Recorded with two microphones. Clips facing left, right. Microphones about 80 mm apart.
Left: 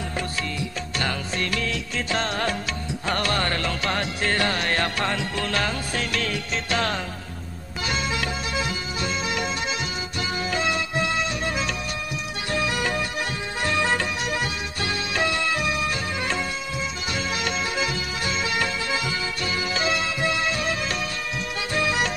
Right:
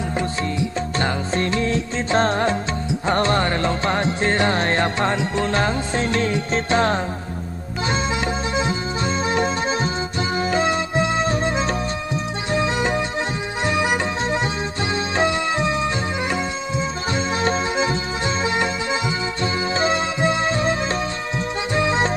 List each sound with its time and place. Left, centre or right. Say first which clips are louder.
0.2 s music: right 6 dB; right
8.5 s music: right 5 dB; right